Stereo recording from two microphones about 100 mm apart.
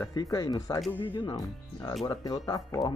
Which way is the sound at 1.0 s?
55° left (ahead or behind).